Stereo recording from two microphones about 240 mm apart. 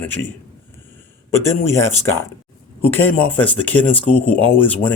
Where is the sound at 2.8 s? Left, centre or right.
Centre.